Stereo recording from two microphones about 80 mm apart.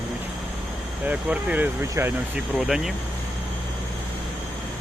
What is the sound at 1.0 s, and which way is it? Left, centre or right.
Speech, centre.